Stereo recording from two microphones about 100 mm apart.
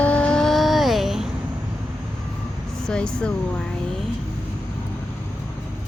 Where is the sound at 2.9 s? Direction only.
10° left (ahead or behind).